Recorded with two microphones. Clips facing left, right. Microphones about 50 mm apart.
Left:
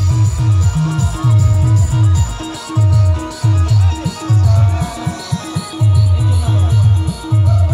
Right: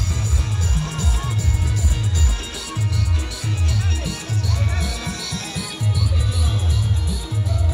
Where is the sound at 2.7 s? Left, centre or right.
Left.